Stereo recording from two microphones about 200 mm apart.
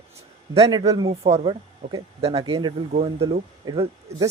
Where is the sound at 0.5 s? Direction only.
25° right (ahead or behind).